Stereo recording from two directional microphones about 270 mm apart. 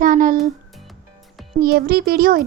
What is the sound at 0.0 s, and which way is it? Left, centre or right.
Music, right.